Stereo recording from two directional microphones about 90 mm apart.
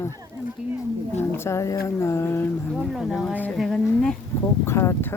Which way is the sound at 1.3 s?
30° left (ahead or behind).